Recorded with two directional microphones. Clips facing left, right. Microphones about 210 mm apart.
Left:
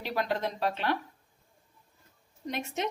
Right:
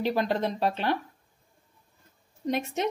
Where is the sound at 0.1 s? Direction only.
30° right (ahead or behind).